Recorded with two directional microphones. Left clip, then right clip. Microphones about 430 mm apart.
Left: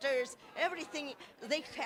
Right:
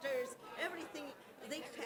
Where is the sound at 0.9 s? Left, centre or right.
Left.